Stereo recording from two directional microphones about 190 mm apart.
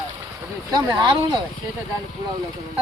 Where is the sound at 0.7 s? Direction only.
25° right (ahead or behind).